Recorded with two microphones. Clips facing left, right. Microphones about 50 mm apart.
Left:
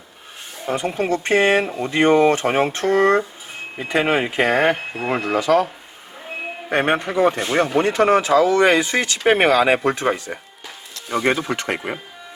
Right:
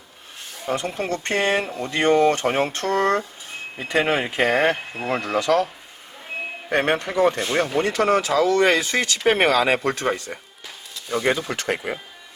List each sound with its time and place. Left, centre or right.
0.9 s speech: centre
6.7 s speech: centre